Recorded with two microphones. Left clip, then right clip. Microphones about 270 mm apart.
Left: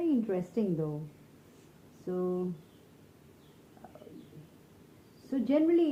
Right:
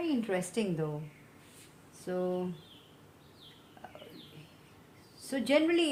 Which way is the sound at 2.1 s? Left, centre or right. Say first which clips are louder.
Even; right.